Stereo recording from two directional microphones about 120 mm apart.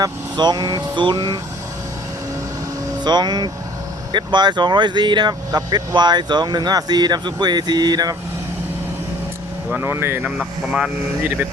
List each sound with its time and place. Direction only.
0.0 s speech: 35° right (ahead or behind)
3.0 s speech: 35° right (ahead or behind)
9.6 s speech: 20° right (ahead or behind)
10.2 s speech: 5° right (ahead or behind)